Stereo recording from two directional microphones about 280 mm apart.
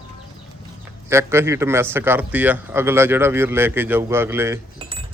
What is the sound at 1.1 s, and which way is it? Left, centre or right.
A man's voice, centre.